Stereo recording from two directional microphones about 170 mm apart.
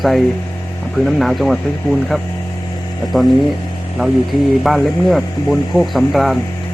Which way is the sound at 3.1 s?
Centre (ahead or behind).